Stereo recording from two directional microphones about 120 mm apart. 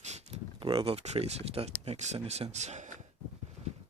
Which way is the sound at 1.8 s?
70° right (ahead or behind).